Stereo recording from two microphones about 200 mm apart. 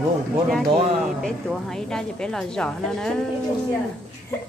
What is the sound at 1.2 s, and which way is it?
A woman's voice, centre (ahead or behind).